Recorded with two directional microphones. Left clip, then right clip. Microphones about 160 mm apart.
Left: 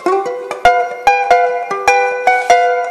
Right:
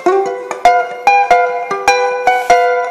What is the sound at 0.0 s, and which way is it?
Music, 60° left (ahead or behind).